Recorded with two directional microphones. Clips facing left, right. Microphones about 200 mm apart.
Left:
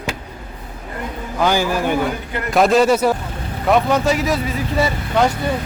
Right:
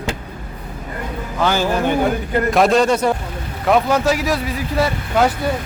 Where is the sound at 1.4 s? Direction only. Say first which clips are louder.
Even; 10° left (ahead or behind).